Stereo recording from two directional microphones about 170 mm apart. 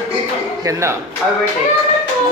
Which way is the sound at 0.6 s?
15° right (ahead or behind).